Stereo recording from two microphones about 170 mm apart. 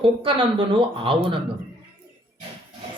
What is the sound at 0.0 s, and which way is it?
Speech, 30° right (ahead or behind).